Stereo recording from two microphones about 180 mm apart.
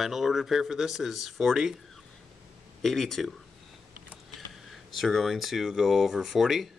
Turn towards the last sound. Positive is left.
turn(degrees=0)  # may be behind; listen again after turning